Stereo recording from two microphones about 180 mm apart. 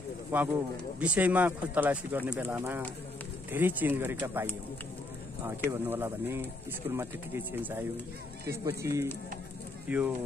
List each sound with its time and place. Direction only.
0.3 s speech: 10° right (ahead or behind)
5.7 s speech: 15° right (ahead or behind)